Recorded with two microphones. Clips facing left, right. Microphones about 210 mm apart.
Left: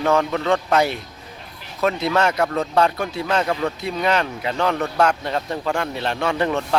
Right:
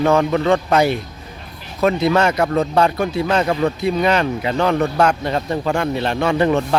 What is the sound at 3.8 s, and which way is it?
Speech, centre (ahead or behind).